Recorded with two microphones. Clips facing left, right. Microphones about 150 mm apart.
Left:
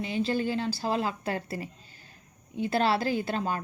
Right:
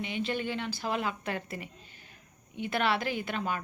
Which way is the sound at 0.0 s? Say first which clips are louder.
Left 4 dB; 35° left (ahead or behind).